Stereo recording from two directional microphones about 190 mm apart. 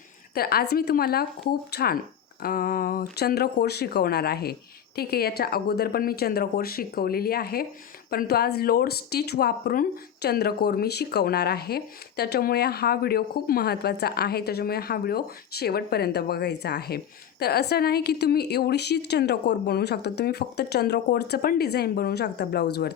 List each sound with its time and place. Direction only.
0.3 s speech: 55° left (ahead or behind)